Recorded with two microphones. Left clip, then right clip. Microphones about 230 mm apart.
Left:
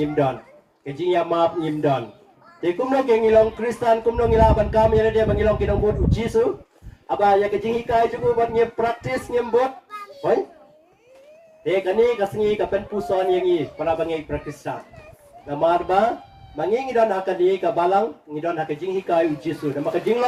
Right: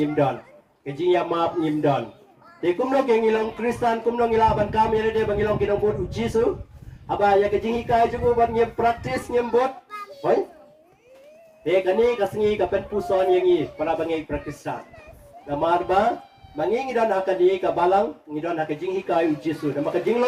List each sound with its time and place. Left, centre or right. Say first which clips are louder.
0.9 s speech: left 1 dB; left
2.6 s speech: even; left
11.6 s speech: left 1 dB; left